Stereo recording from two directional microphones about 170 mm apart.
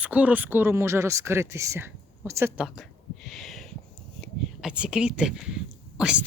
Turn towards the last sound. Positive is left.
turn(degrees=-5)  # may be behind; listen again after turning